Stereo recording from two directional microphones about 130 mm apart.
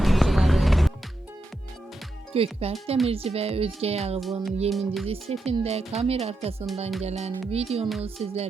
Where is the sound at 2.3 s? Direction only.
50° right (ahead or behind).